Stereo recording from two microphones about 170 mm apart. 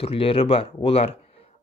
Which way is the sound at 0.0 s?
35° left (ahead or behind).